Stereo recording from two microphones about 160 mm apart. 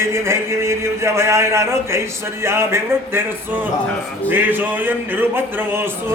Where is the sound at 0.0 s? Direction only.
15° right (ahead or behind).